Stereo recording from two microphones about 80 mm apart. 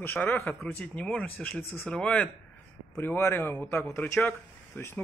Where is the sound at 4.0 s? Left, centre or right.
Centre.